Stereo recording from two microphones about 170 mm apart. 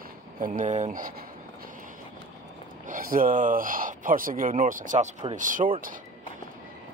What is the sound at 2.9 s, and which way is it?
Speech, 55° right (ahead or behind).